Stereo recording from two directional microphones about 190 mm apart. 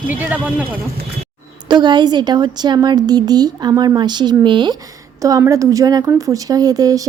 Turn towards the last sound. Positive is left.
turn(degrees=-20)  # may be behind; listen again after turning